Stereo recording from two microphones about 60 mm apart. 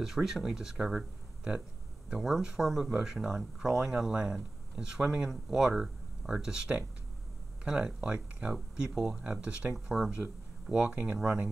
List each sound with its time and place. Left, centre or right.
0.0 s speech: centre